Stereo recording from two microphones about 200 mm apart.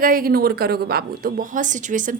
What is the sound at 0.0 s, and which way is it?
Speech, 45° right (ahead or behind).